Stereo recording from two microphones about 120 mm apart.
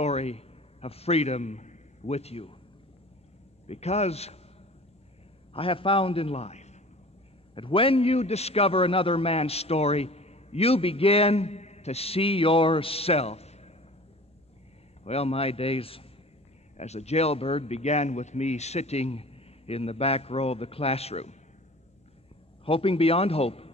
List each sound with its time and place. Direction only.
0.0 s a man's voice: 60° left (ahead or behind)
3.6 s a man's voice: 60° left (ahead or behind)
5.5 s a man's voice: 50° left (ahead or behind); by 6.8 s 65° left (ahead or behind)
7.5 s a man's voice: 50° left (ahead or behind)
15.0 s a man's voice: 60° left (ahead or behind)
16.7 s a man's voice: 65° left (ahead or behind)
22.7 s a man's voice: 50° left (ahead or behind)